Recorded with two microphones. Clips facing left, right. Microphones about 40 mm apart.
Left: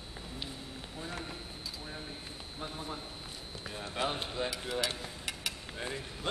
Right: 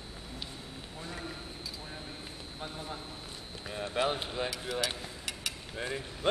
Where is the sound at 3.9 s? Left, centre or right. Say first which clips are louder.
Right 3 dB; centre.